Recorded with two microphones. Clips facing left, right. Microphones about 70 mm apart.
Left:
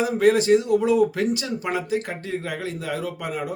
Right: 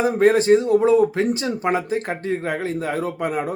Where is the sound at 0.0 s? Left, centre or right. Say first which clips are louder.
Right 2 dB; right.